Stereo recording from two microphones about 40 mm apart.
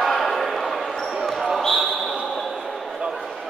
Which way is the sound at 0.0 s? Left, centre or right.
Centre.